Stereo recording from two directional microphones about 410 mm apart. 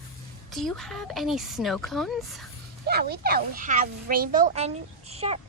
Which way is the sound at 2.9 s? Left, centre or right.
Right.